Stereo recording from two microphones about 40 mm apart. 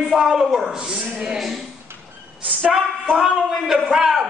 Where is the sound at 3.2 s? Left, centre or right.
Centre.